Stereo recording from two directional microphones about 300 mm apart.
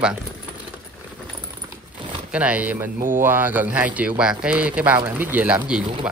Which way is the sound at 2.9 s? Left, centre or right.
Right.